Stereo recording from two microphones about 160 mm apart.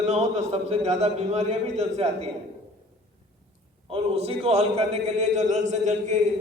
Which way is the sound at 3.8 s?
35° right (ahead or behind).